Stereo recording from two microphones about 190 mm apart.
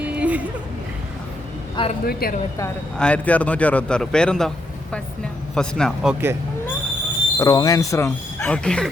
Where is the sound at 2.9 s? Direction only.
5° left (ahead or behind).